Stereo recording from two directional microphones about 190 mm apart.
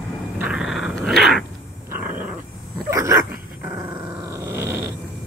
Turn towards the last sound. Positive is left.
turn(degrees=-15)  # may be behind; listen again after turning